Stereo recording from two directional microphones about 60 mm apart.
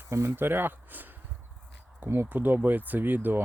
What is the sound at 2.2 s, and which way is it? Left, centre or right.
Speech, right.